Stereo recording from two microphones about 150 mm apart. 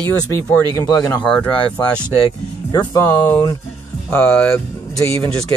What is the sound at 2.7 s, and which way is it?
Speech, 20° left (ahead or behind).